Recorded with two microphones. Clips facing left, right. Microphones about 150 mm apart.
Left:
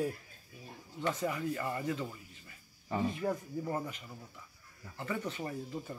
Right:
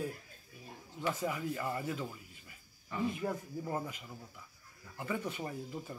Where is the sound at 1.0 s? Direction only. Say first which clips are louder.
Left 2 dB; 10° right (ahead or behind).